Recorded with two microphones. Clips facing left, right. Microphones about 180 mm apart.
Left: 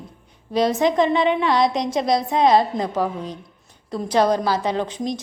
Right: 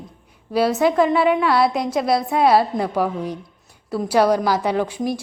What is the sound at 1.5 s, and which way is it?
A woman's voice, 5° right (ahead or behind).